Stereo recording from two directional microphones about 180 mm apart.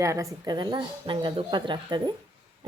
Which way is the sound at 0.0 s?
15° right (ahead or behind).